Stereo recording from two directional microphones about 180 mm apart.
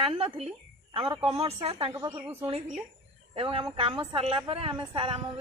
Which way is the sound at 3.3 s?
30° right (ahead or behind).